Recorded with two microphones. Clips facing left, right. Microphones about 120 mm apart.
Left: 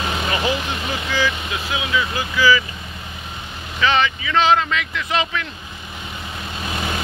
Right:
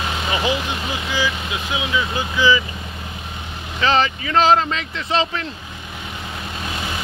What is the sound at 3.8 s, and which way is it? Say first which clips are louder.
Speech: right 1 dB; 35° right (ahead or behind).